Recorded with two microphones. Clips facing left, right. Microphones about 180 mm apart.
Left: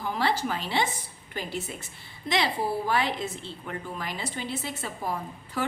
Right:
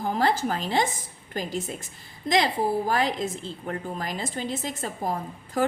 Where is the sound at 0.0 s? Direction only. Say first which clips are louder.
Right 3 dB; 45° right (ahead or behind).